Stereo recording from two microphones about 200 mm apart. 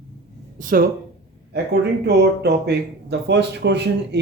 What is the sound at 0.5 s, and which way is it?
Speech, 45° right (ahead or behind).